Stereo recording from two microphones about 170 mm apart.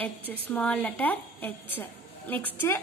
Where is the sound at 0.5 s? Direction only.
10° left (ahead or behind).